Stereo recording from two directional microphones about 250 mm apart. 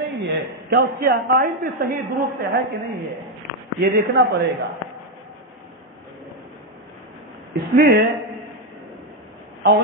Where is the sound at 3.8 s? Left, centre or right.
Right.